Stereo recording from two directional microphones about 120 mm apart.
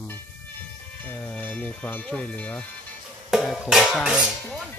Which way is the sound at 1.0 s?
10° left (ahead or behind).